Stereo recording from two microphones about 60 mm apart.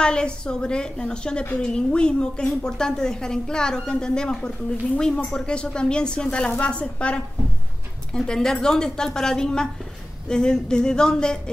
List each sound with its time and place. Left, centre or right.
0.0 s a woman's voice: centre